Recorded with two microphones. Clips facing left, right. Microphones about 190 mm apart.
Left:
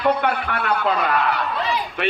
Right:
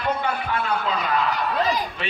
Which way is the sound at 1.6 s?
40° right (ahead or behind).